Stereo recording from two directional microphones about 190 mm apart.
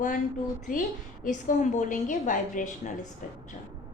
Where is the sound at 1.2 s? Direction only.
40° left (ahead or behind).